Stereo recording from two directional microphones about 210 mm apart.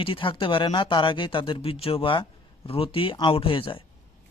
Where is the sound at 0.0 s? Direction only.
25° left (ahead or behind).